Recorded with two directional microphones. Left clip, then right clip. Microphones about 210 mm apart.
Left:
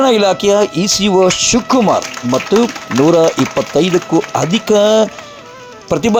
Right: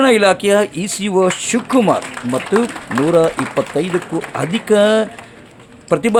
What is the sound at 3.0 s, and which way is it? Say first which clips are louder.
Speech: left 4 dB; 20° left (ahead or behind).